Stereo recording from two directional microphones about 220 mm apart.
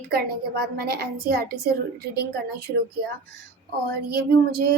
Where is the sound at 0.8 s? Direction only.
45° right (ahead or behind).